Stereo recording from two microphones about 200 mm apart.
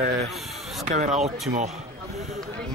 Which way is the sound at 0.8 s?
40° right (ahead or behind).